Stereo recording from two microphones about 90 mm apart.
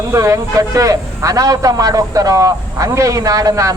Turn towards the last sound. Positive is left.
turn(degrees=-40)  # may be behind; listen again after turning